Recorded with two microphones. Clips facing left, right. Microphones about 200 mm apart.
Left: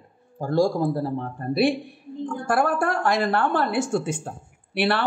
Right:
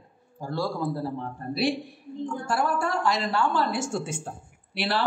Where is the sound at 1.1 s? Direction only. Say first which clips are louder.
Left 6 dB; 55° left (ahead or behind).